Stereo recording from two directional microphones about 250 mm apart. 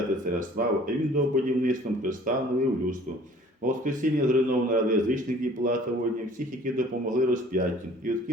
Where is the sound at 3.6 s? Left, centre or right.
Right.